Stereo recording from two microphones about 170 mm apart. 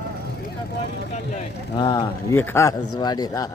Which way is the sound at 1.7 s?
25° left (ahead or behind).